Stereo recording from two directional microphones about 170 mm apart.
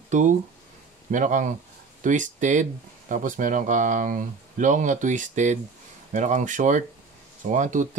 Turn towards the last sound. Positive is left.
turn(degrees=-45)  # may be behind; listen again after turning